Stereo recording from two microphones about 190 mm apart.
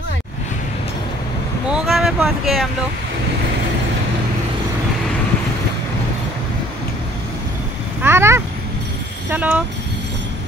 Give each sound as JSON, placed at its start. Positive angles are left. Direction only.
{"t": 1.7, "sound": "speech", "side_deg": -5}
{"t": 8.0, "sound": "cat", "side_deg": -10}
{"t": 9.3, "sound": "speech", "side_deg": -10}